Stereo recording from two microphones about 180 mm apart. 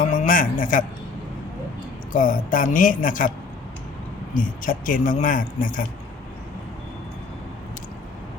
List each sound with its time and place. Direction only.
0.0 s a sound: 45° left (ahead or behind)
2.1 s speech: 50° left (ahead or behind)
4.6 s speech: 50° left (ahead or behind)